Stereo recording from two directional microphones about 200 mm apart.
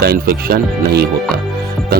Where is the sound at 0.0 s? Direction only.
50° right (ahead or behind).